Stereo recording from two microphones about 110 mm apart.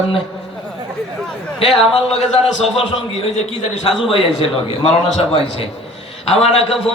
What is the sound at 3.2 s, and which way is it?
A man's voice, 60° left (ahead or behind).